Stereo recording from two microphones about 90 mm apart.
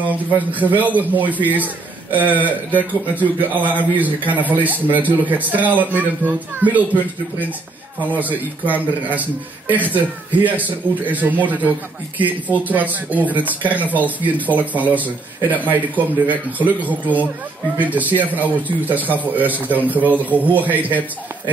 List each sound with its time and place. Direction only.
0.0 s a man's voice: 20° right (ahead or behind)